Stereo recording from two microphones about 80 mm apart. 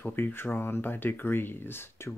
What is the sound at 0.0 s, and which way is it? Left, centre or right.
Speech, left.